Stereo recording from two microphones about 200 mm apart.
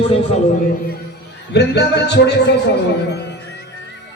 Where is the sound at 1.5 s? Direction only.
60° left (ahead or behind).